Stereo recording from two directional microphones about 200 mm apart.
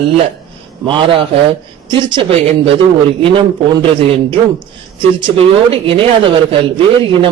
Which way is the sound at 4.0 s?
30° right (ahead or behind).